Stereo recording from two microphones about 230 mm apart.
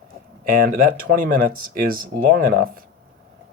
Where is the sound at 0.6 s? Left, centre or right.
Right.